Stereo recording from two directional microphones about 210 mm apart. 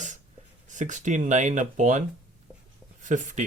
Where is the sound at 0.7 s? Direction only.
35° right (ahead or behind).